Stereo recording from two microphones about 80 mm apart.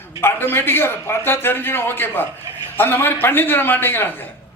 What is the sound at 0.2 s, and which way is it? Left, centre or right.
A man's voice, left.